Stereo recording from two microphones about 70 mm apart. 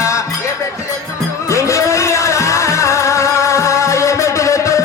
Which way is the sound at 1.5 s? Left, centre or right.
Left.